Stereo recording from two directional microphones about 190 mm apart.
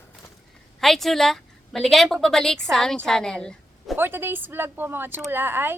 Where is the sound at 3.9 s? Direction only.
10° right (ahead or behind).